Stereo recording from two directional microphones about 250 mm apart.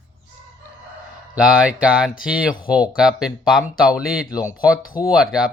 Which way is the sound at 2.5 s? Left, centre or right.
Left.